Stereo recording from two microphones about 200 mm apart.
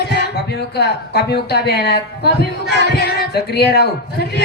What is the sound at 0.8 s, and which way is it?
A woman's voice, 55° left (ahead or behind).